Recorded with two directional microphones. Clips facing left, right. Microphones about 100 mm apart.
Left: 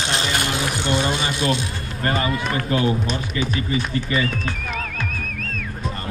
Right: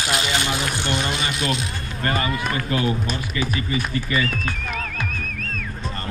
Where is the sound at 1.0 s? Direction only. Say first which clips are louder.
Left 3 dB; 30° left (ahead or behind).